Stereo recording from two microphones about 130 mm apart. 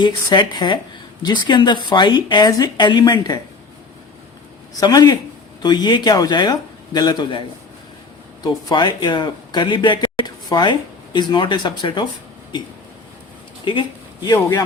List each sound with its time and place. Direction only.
0.0 s speech: 35° left (ahead or behind)
4.8 s speech: 30° left (ahead or behind)
8.7 s speech: 35° left (ahead or behind)
13.7 s speech: 35° left (ahead or behind)